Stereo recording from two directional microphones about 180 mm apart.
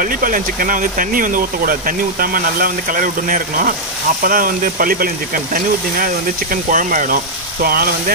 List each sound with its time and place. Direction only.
0.0 s speech: 50° right (ahead or behind)